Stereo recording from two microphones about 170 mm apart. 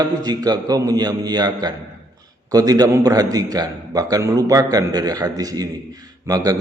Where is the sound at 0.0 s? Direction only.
20° right (ahead or behind).